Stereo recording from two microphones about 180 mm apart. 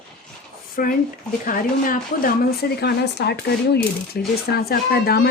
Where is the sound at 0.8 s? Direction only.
50° left (ahead or behind).